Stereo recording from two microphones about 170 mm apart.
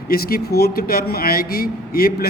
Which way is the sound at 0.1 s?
60° left (ahead or behind).